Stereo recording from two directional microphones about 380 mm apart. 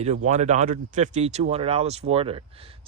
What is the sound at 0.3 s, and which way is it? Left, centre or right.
Speech, centre.